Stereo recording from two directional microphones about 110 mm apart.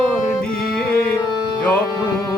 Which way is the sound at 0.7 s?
5° left (ahead or behind).